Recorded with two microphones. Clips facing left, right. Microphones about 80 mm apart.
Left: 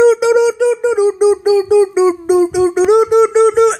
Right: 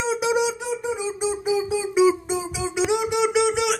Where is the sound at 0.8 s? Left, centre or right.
Left.